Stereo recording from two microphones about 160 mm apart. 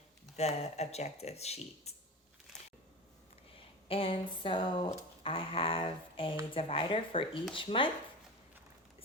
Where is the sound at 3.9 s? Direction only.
35° left (ahead or behind).